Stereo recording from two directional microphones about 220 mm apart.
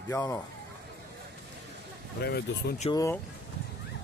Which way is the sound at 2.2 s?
45° left (ahead or behind).